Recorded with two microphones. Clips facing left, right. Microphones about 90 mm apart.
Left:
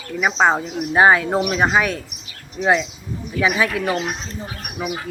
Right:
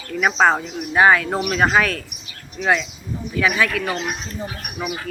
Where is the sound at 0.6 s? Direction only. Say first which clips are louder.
Left 1 dB; 30° left (ahead or behind).